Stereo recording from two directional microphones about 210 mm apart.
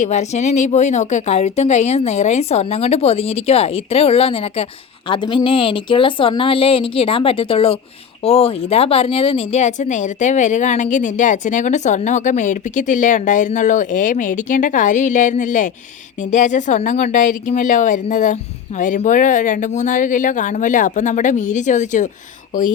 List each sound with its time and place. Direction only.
0.0 s speech: 30° left (ahead or behind)